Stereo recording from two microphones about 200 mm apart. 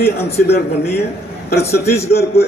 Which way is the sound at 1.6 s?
15° left (ahead or behind).